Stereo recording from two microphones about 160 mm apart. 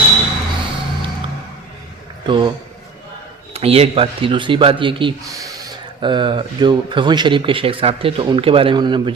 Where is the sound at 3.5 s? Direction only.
40° right (ahead or behind).